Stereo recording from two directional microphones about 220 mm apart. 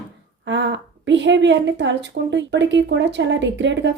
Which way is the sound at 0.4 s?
55° right (ahead or behind).